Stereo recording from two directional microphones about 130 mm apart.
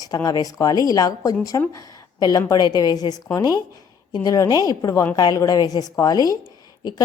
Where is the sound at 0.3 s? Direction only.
30° left (ahead or behind).